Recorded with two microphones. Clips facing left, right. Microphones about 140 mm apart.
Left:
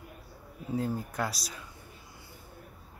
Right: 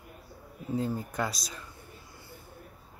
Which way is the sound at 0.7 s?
5° left (ahead or behind).